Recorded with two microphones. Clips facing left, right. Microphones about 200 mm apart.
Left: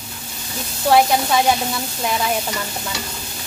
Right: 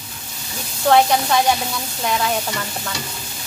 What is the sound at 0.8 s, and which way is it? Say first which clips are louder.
Sizzle: even; 5° left (ahead or behind).